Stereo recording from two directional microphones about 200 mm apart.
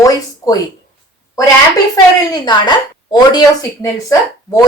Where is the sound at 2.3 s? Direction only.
20° left (ahead or behind).